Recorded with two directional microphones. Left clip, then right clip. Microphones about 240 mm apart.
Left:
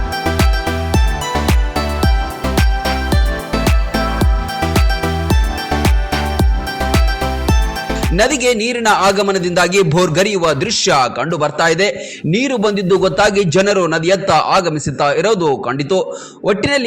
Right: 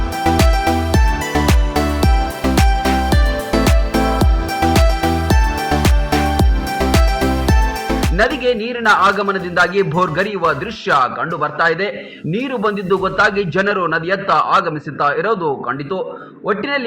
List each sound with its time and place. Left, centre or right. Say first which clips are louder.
0.3 s music: right 5 dB; centre
8.1 s a man's voice: left 3 dB; left